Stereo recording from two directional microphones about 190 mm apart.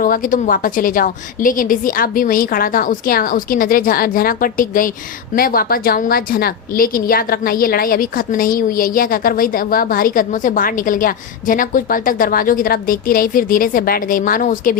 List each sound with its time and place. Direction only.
0.0 s a woman's voice: 45° left (ahead or behind)